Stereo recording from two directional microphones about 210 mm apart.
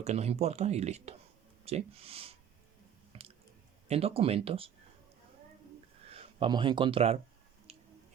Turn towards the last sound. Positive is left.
turn(degrees=-30)  # may be behind; listen again after turning